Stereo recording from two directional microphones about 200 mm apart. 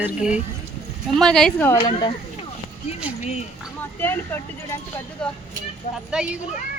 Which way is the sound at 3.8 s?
10° left (ahead or behind).